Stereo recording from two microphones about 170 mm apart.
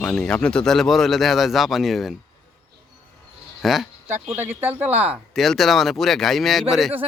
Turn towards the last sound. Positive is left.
turn(degrees=0)  # may be behind; listen again after turning